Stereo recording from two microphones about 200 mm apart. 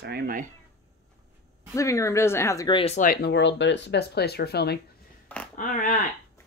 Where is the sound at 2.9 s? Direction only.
45° left (ahead or behind).